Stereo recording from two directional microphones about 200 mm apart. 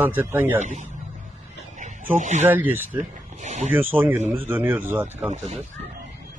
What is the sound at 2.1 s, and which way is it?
Speech, 35° right (ahead or behind).